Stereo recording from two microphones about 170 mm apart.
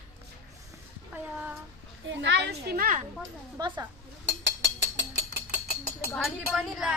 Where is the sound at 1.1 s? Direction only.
10° right (ahead or behind).